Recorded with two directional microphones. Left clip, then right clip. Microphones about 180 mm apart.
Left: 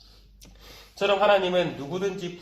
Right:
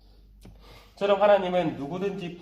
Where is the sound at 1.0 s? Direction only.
15° left (ahead or behind).